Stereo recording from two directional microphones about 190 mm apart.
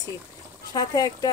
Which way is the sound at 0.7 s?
20° left (ahead or behind).